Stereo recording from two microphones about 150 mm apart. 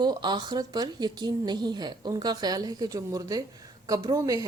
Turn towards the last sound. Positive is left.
turn(degrees=-25)  # may be behind; listen again after turning